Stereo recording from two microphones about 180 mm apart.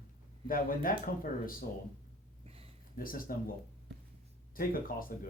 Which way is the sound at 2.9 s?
50° left (ahead or behind).